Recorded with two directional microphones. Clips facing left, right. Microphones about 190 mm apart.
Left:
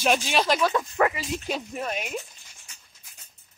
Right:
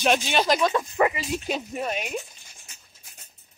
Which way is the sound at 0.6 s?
10° right (ahead or behind).